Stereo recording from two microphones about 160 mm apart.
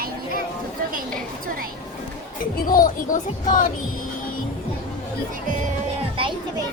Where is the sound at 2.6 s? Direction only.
60° left (ahead or behind).